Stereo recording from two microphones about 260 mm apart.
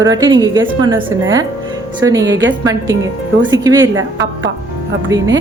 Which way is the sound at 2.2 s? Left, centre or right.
Right.